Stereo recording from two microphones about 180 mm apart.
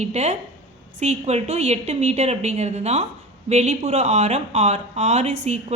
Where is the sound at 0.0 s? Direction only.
40° right (ahead or behind).